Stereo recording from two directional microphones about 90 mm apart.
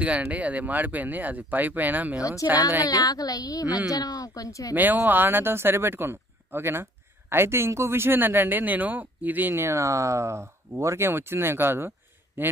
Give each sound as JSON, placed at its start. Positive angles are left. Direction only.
{"t": 0.0, "sound": "speech", "side_deg": -15}
{"t": 2.8, "sound": "speech", "side_deg": 45}
{"t": 4.7, "sound": "speech", "side_deg": -20}